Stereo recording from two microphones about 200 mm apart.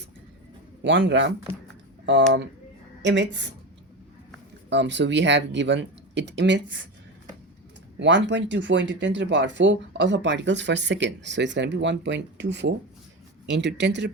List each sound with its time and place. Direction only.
0.8 s speech: 65° right (ahead or behind)
4.7 s speech: 60° right (ahead or behind)
7.9 s speech: 60° right (ahead or behind)